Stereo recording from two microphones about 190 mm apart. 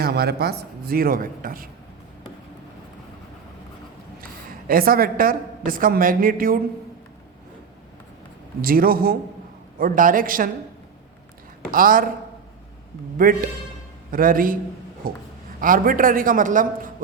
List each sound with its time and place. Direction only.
0.0 s a woman's voice: 55° right (ahead or behind)
4.7 s a woman's voice: 50° right (ahead or behind)
8.6 s a woman's voice: 50° right (ahead or behind)
11.7 s a woman's voice: 45° right (ahead or behind)
13.1 s a woman's voice: 45° right (ahead or behind)